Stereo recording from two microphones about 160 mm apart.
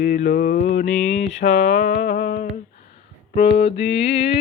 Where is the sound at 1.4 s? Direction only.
45° left (ahead or behind).